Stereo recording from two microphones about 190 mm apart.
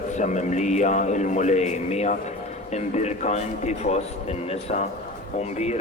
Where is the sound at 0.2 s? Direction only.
40° left (ahead or behind).